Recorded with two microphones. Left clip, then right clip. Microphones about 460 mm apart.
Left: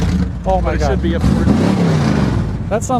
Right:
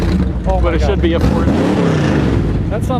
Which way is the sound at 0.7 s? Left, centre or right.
Right.